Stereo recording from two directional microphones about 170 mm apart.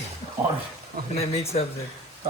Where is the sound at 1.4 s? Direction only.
35° left (ahead or behind).